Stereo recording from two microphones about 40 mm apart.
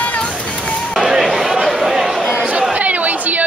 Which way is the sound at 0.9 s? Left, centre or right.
Centre.